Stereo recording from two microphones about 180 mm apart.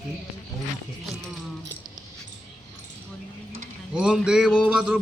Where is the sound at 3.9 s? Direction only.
5° right (ahead or behind).